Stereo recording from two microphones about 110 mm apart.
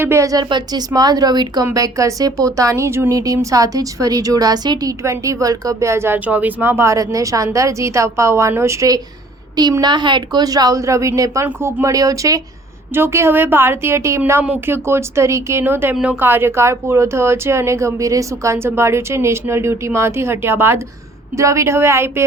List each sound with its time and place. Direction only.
0.0 s a woman's voice: 25° right (ahead or behind)
0.4 s a woman's voice: 40° right (ahead or behind)
9.8 s a woman's voice: 45° right (ahead or behind); by 22.2 s 25° right (ahead or behind)